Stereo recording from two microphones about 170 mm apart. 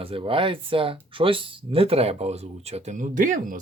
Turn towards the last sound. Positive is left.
turn(degrees=-50)  # may be behind; listen again after turning